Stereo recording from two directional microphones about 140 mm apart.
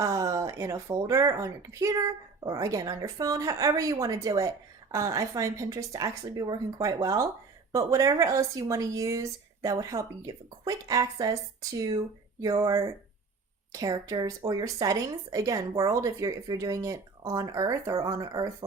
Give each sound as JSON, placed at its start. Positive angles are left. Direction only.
{"t": 0.0, "sound": "a woman's voice", "side_deg": -25}